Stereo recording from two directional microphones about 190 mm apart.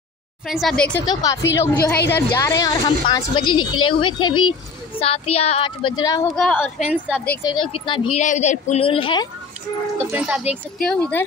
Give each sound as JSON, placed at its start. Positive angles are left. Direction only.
{"t": 0.5, "sound": "a woman's voice", "side_deg": 0}
{"t": 1.0, "sound": "a woman's voice", "side_deg": 15}
{"t": 6.3, "sound": "a woman's voice", "side_deg": 0}
{"t": 7.4, "sound": "a woman's voice", "side_deg": 25}
{"t": 8.2, "sound": "a woman's voice", "side_deg": 40}
{"t": 10.1, "sound": "a woman's voice", "side_deg": -5}
{"t": 10.8, "sound": "a woman's voice", "side_deg": 5}